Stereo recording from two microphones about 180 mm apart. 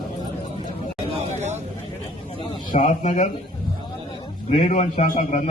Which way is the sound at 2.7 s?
40° left (ahead or behind).